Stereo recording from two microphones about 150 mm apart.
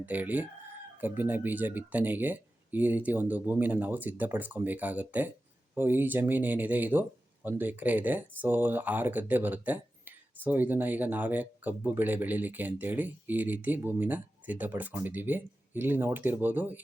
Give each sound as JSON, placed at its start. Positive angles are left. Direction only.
{"t": 0.0, "sound": "speech", "side_deg": -10}